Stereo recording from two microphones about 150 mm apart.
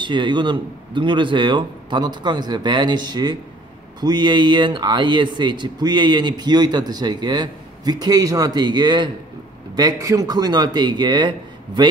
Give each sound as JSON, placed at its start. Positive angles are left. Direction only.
{"t": 0.0, "sound": "a man's voice", "side_deg": -30}